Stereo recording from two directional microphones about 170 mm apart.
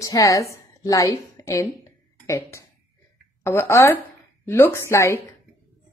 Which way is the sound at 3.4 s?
15° left (ahead or behind).